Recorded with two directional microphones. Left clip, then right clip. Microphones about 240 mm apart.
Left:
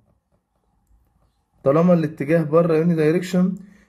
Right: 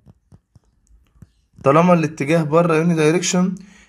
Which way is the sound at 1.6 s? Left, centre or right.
Centre.